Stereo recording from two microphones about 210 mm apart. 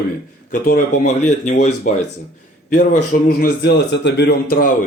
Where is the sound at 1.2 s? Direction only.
35° left (ahead or behind).